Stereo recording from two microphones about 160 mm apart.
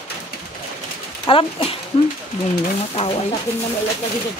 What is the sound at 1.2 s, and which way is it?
Speech, 35° left (ahead or behind).